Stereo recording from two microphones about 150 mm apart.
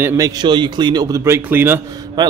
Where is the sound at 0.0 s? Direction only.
20° right (ahead or behind).